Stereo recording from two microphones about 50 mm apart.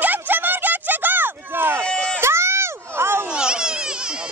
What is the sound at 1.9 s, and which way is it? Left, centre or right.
Run, centre.